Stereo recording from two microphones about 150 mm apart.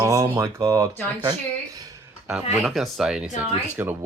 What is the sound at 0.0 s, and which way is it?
Speech, 20° right (ahead or behind).